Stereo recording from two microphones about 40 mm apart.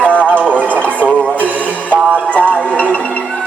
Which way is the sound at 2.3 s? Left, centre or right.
Left.